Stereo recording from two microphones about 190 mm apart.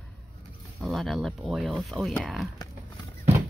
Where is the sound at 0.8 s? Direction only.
Centre (ahead or behind).